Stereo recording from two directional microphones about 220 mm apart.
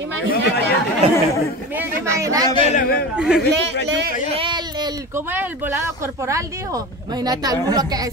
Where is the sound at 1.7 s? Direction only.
10° right (ahead or behind).